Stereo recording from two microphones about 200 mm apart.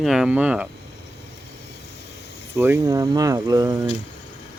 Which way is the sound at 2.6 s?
10° right (ahead or behind).